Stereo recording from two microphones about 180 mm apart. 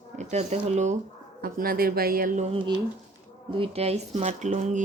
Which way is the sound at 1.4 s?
55° right (ahead or behind).